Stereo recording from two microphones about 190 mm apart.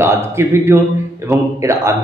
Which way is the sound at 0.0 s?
15° right (ahead or behind).